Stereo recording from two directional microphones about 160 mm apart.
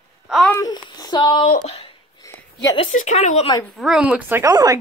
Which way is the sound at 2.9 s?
50° left (ahead or behind).